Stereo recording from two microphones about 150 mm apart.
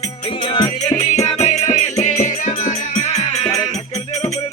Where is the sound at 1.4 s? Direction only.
50° left (ahead or behind).